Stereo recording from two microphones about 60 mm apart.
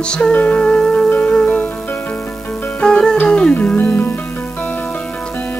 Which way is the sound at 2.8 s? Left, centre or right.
Centre.